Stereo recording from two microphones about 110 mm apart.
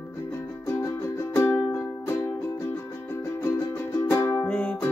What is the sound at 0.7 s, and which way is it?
Music, 25° left (ahead or behind).